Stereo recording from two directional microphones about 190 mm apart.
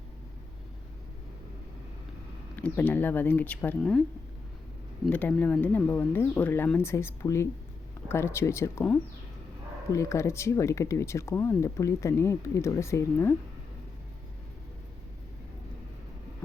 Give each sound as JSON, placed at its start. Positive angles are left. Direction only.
{"t": 2.6, "sound": "speech", "side_deg": 10}
{"t": 5.0, "sound": "speech", "side_deg": 5}